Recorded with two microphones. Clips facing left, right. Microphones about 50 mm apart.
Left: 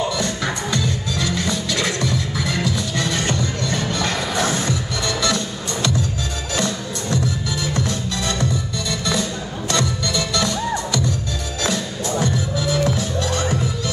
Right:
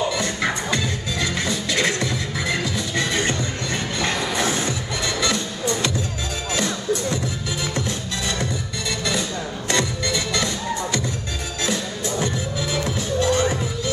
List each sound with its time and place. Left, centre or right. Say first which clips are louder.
0.2 s music: even; right
9.7 s music: left 1 dB; right
12.8 s music: even; right